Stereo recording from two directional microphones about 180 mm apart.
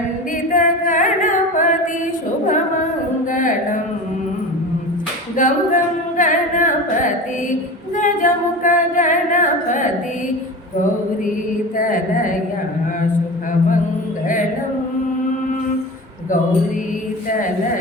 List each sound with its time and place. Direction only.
0.5 s singing: 45° left (ahead or behind)
3.3 s a sound: 45° left (ahead or behind)
5.4 s music: 45° left (ahead or behind)
7.9 s singing: 45° left (ahead or behind)